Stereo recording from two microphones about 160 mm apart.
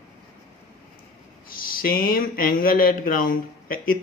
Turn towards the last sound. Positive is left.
turn(degrees=60)  # may be behind; listen again after turning